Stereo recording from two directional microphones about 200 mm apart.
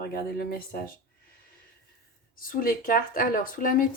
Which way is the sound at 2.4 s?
45° left (ahead or behind).